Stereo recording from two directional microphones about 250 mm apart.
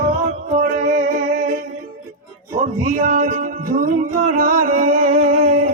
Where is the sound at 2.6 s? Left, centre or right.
Right.